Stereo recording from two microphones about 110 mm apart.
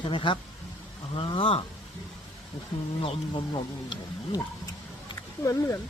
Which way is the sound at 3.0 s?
55° left (ahead or behind).